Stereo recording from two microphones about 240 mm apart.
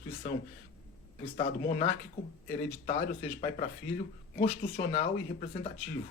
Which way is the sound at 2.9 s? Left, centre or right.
Left.